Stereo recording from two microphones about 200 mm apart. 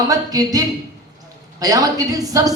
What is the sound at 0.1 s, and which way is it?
Speech, 20° right (ahead or behind).